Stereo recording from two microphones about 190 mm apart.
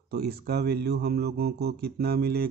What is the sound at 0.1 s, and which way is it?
A man's voice, 55° right (ahead or behind).